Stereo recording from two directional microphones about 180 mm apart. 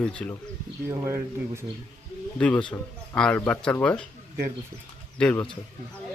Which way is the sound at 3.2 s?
5° left (ahead or behind).